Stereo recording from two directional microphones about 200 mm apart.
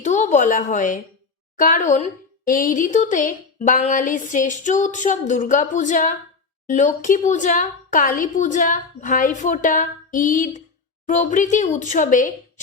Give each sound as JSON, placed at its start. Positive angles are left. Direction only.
{"t": 0.0, "sound": "a woman's voice", "side_deg": 35}